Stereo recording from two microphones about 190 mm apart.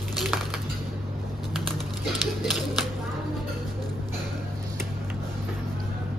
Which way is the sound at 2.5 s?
Centre (ahead or behind).